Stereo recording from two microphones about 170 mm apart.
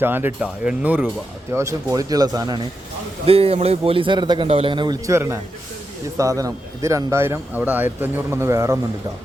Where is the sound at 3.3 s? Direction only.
35° right (ahead or behind); by 8.7 s 15° right (ahead or behind).